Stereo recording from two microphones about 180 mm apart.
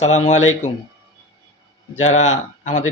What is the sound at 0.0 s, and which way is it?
Speech, 40° left (ahead or behind).